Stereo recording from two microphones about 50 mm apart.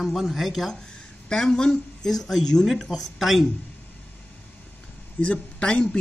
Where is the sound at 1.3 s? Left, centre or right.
Centre.